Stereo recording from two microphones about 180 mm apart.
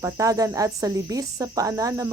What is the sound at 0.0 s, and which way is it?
Speech, 20° right (ahead or behind).